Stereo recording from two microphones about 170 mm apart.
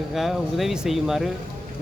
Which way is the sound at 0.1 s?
Centre (ahead or behind).